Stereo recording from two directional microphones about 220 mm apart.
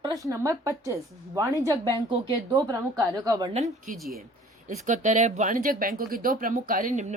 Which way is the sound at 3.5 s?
30° right (ahead or behind).